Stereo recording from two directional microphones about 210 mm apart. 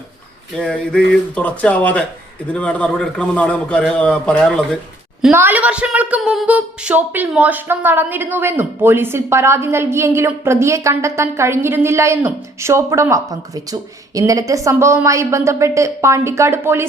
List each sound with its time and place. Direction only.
0.5 s a man's voice: 5° left (ahead or behind)
5.2 s a woman's voice: 10° right (ahead or behind)